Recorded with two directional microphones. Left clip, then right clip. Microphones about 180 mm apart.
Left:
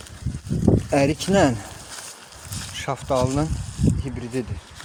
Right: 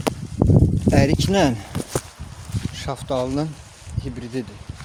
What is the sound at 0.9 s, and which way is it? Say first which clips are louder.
Speech: right 3 dB; 15° right (ahead or behind).